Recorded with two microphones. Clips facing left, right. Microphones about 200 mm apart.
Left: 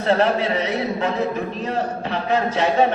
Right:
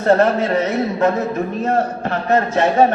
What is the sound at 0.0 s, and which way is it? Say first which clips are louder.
A man's voice: right 4 dB; 45° right (ahead or behind).